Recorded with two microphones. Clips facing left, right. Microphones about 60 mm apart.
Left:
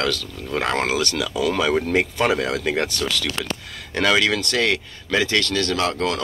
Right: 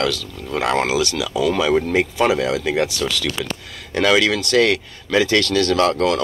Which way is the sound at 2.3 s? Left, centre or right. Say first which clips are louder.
Right 3 dB; left.